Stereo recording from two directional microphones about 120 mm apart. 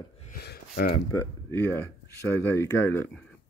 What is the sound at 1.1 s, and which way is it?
Speech, 20° left (ahead or behind).